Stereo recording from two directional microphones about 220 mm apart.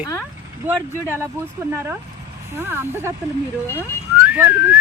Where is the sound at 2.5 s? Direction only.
10° right (ahead or behind).